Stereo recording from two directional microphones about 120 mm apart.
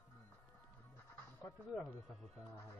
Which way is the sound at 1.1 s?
15° left (ahead or behind).